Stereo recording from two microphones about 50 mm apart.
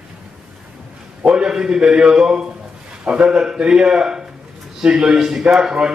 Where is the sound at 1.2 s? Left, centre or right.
Centre.